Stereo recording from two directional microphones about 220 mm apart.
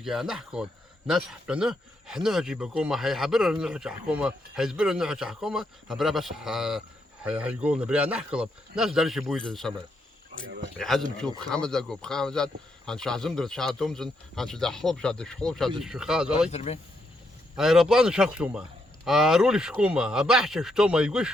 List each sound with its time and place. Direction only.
0.0 s speech: centre (ahead or behind)
10.8 s speech: centre (ahead or behind)
16.5 s speech: 30° left (ahead or behind)
17.6 s speech: centre (ahead or behind)